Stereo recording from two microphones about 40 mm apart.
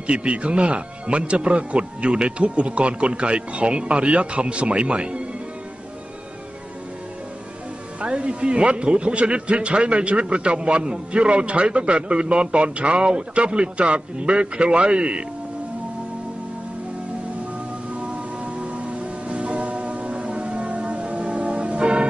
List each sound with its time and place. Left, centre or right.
0.0 s a man's voice: right
8.0 s a man's voice: right
17.9 s music: right